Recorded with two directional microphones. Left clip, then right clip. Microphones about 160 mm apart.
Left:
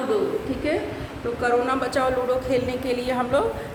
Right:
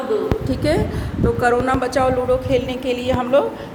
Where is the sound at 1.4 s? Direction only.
50° right (ahead or behind).